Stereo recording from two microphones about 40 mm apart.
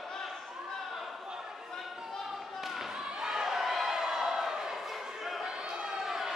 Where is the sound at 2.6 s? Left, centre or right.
Centre.